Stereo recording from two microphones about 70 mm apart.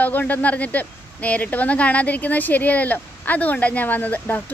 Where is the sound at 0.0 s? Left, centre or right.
Left.